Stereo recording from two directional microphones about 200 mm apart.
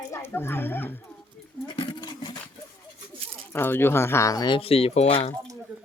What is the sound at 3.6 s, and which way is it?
Speech, 10° left (ahead or behind).